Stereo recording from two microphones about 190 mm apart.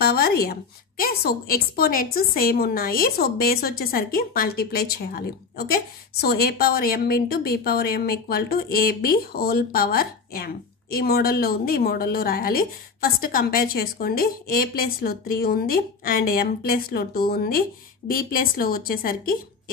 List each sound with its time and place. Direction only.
0.0 s a woman's voice: 55° left (ahead or behind)